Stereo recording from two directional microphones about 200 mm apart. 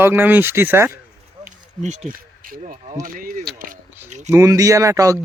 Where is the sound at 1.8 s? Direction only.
35° right (ahead or behind).